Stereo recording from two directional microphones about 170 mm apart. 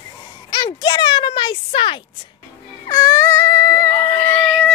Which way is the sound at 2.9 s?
15° left (ahead or behind).